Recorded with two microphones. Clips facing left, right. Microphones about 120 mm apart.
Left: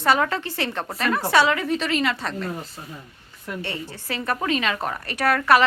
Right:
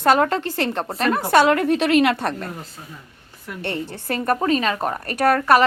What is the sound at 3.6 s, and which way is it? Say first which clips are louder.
Speech: right 5 dB; 60° right (ahead or behind).